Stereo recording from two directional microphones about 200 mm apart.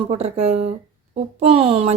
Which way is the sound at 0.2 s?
30° right (ahead or behind).